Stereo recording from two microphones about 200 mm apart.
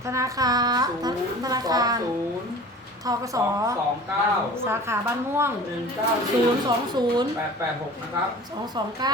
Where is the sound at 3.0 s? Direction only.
15° right (ahead or behind).